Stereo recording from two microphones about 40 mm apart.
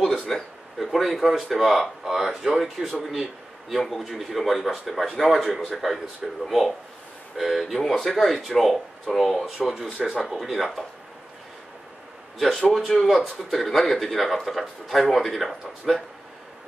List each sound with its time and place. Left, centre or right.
0.0 s a man's voice: centre
9.9 s speech: centre
10.2 s a man's voice: centre
12.4 s a man's voice: centre